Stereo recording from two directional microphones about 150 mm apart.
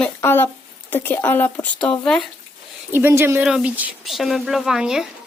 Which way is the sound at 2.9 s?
15° right (ahead or behind).